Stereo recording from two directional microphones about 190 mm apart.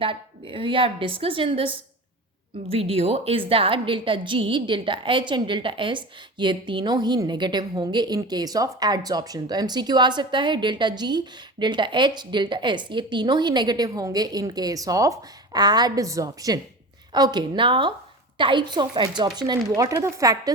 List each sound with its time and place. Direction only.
0.0 s a woman's voice: 25° right (ahead or behind)